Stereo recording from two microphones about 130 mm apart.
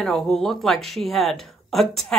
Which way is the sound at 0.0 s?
5° left (ahead or behind).